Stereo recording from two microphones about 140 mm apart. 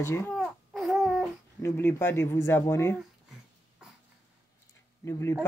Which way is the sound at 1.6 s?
20° left (ahead or behind).